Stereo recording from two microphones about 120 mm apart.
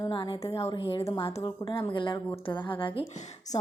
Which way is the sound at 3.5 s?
60° left (ahead or behind).